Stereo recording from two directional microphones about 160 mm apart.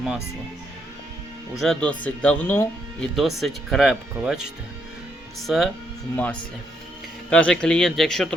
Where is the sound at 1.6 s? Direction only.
5° left (ahead or behind).